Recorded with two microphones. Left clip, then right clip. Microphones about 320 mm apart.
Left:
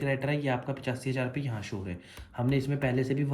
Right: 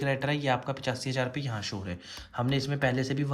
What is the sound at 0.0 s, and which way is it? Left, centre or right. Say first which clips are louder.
Speech: right 1 dB; centre.